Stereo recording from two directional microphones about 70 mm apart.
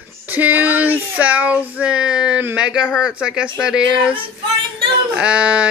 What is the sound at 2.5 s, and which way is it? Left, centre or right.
Speech, centre.